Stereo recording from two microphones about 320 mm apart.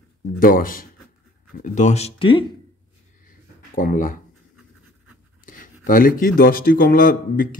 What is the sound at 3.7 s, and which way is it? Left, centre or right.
Speech, left.